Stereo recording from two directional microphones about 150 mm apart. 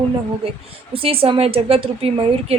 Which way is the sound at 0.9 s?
40° right (ahead or behind).